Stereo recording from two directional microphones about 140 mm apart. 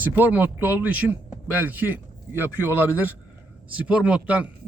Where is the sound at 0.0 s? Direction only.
15° right (ahead or behind).